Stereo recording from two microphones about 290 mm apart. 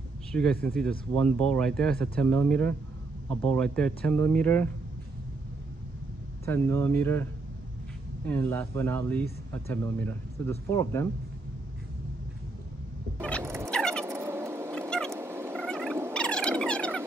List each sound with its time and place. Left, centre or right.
0.3 s speech: centre
6.4 s speech: centre
8.3 s speech: centre
13.4 s a sound: centre
13.7 s vehicle: centre
14.0 s cat: centre
14.7 s a sound: centre
15.1 s fowl: centre
15.6 s fowl: centre
16.1 s a sound: centre